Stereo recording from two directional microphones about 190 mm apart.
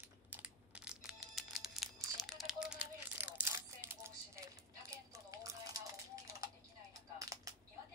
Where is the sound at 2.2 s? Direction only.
5° right (ahead or behind).